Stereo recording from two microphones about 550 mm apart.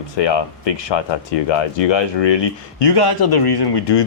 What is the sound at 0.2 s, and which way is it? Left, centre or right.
Speech, left.